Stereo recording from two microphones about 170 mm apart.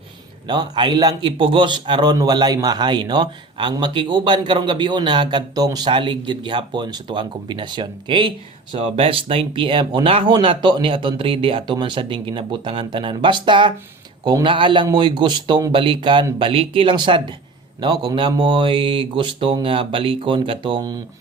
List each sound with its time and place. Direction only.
0.4 s a man's voice: 25° right (ahead or behind)